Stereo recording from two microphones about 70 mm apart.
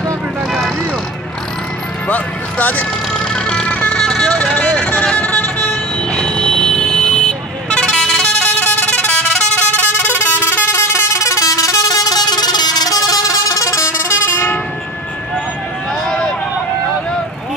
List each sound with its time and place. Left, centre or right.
2.0 s music: left
3.1 s vehicle: centre
8.5 s vehicle: left
10.0 s vehicle horn: left
16.1 s hubbub: centre